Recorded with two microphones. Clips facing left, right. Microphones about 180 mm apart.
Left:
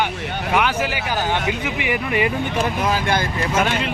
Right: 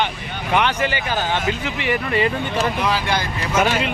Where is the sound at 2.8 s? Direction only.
45° left (ahead or behind).